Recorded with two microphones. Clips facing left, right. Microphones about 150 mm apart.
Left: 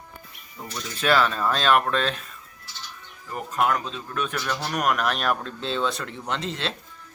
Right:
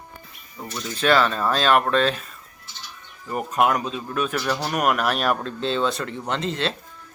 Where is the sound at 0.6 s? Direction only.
Centre (ahead or behind).